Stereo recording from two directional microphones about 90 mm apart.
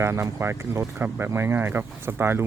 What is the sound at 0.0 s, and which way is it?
Speech, 35° right (ahead or behind).